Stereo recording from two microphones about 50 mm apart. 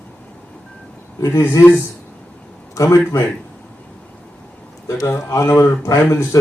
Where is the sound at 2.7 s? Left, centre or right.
Left.